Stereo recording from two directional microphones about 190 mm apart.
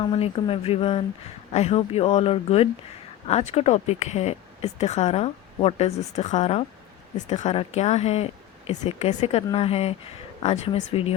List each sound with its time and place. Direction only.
0.0 s speech: 25° left (ahead or behind)